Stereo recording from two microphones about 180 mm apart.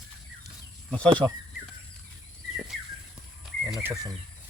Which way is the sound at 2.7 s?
Centre (ahead or behind).